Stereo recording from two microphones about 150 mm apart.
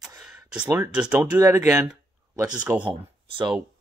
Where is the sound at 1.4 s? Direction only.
20° right (ahead or behind).